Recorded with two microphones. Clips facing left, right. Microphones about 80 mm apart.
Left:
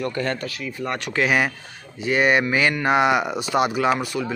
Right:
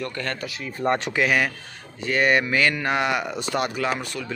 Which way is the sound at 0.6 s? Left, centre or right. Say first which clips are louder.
Right 4 dB; right.